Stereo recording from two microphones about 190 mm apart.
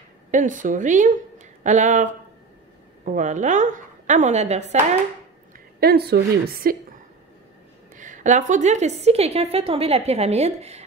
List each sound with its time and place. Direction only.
0.3 s a woman's voice: 40° right (ahead or behind)
3.1 s a woman's voice: 40° right (ahead or behind)
5.8 s a woman's voice: 55° right (ahead or behind)
7.9 s a woman's voice: 40° right (ahead or behind)